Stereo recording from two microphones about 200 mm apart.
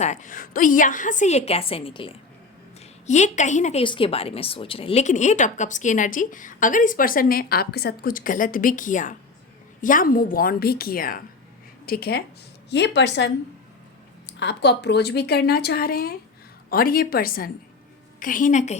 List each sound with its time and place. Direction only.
0.0 s speech: 40° left (ahead or behind)
3.1 s a woman's voice: 35° left (ahead or behind); by 13.3 s 60° left (ahead or behind)
14.3 s speech: 60° left (ahead or behind); by 18.8 s 35° left (ahead or behind)